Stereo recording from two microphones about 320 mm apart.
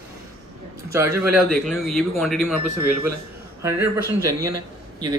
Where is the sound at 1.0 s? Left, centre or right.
Right.